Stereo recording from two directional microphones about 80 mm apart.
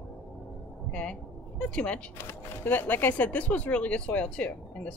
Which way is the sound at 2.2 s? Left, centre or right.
Left.